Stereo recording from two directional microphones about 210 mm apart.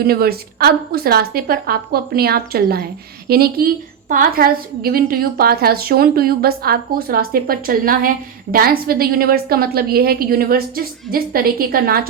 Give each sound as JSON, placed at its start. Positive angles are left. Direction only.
{"t": 0.0, "sound": "a woman's voice", "side_deg": -45}